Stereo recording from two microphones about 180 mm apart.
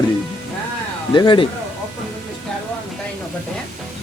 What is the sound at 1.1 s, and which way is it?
Speech, 25° left (ahead or behind).